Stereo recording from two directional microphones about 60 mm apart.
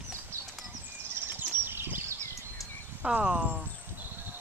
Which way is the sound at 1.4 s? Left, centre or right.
Right.